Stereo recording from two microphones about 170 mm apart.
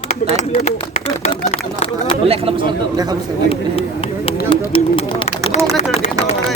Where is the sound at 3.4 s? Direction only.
35° left (ahead or behind).